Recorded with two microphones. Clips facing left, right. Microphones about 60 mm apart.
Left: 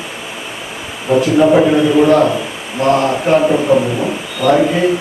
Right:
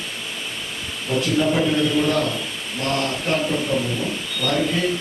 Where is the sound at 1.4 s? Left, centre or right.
Left; by 3.1 s centre.